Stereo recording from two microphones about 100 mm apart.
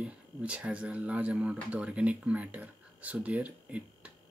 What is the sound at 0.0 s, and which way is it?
Speech, 10° right (ahead or behind).